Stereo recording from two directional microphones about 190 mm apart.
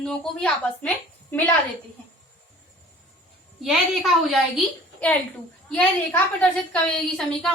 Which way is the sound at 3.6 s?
Centre (ahead or behind).